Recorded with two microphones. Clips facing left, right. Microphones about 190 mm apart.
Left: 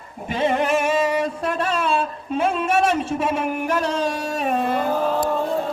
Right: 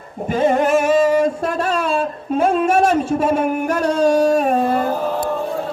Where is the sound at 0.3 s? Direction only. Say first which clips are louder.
Right 5 dB; 45° right (ahead or behind).